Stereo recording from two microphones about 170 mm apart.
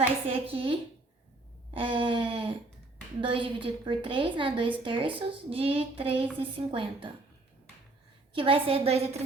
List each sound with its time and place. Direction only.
0.3 s a woman's voice: 35° right (ahead or behind)
8.3 s a woman's voice: 30° right (ahead or behind)